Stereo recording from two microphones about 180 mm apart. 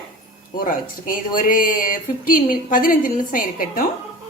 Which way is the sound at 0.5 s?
50° left (ahead or behind).